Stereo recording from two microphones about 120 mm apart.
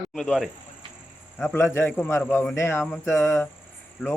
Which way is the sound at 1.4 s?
20° left (ahead or behind).